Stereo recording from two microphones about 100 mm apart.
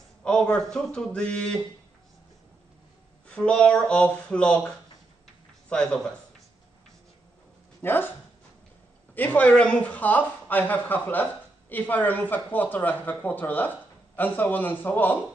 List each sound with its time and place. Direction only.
0.2 s speech: 10° left (ahead or behind)
3.3 s speech: 10° left (ahead or behind)
7.8 s speech: 20° left (ahead or behind)
9.1 s speech: 20° left (ahead or behind)